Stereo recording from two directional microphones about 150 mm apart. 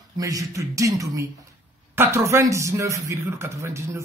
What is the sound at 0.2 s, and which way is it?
Speech, 20° right (ahead or behind).